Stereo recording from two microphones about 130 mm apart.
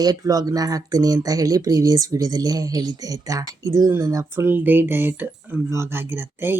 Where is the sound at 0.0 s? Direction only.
30° right (ahead or behind).